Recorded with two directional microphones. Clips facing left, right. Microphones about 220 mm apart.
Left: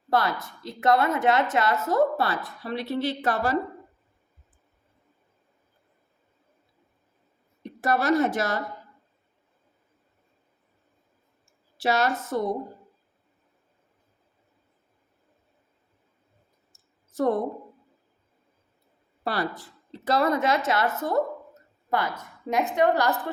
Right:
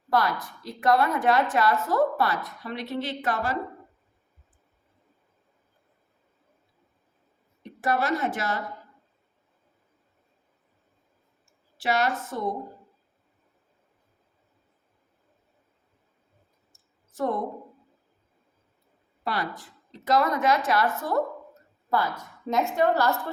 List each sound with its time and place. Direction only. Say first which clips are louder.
0.1 s a woman's voice: even; 25° left (ahead or behind)
7.8 s a woman's voice: left 4 dB; 40° left (ahead or behind)
11.8 s a woman's voice: left 1 dB; 35° left (ahead or behind)
19.2 s a woman's voice: left 2 dB; 35° left (ahead or behind); by 23.2 s 15° left (ahead or behind)